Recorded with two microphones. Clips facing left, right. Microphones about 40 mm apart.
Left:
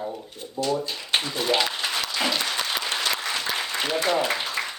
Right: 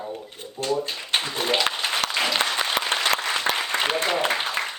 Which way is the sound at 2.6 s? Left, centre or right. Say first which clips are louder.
Right 3 dB; right.